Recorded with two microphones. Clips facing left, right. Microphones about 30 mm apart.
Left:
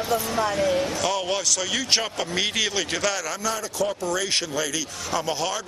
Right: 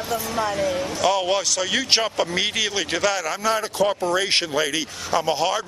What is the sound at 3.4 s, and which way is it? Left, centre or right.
A man's voice, right.